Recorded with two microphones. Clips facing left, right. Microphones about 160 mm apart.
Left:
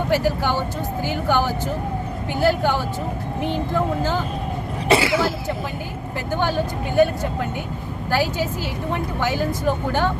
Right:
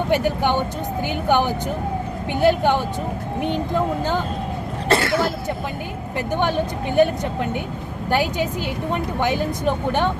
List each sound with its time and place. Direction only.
0.1 s speech: 20° right (ahead or behind)
4.9 s cough: 5° left (ahead or behind)
6.3 s speech: 20° right (ahead or behind)
8.1 s speech: 20° right (ahead or behind)